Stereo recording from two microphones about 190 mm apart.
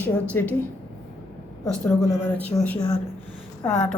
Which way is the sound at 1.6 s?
5° left (ahead or behind).